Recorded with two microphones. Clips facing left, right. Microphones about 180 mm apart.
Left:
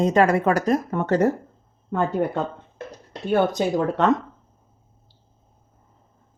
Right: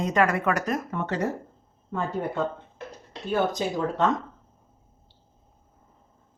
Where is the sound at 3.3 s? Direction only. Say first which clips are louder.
Left 5 dB; 65° left (ahead or behind).